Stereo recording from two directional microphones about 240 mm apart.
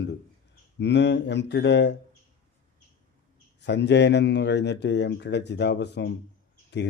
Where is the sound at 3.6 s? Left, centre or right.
Left.